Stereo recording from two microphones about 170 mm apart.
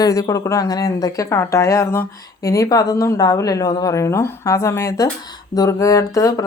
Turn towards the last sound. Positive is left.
turn(degrees=20)  # may be behind; listen again after turning